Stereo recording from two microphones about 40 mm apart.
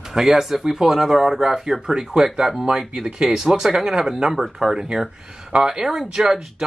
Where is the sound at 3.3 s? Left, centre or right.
Centre.